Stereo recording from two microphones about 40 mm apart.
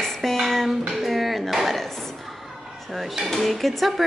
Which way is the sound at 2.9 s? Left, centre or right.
Centre.